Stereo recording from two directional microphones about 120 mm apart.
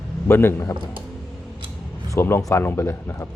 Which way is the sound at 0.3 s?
20° left (ahead or behind).